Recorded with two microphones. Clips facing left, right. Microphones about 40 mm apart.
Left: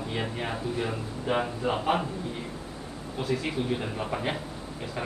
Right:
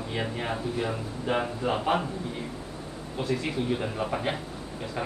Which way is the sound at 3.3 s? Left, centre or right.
Centre.